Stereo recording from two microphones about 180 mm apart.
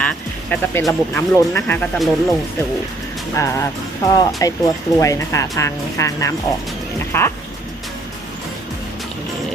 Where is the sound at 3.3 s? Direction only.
15° left (ahead or behind).